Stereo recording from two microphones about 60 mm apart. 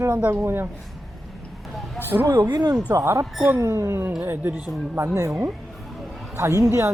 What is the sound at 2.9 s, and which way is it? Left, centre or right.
A woman's voice, right.